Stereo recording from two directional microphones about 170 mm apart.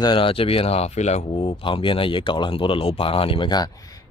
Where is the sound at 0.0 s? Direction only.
30° left (ahead or behind).